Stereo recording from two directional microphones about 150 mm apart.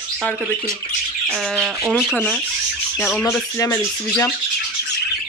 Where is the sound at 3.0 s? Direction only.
15° left (ahead or behind).